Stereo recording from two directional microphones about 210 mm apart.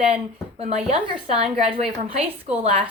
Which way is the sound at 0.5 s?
30° right (ahead or behind).